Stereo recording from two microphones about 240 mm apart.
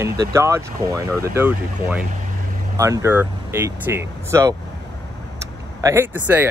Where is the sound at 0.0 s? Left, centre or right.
Centre.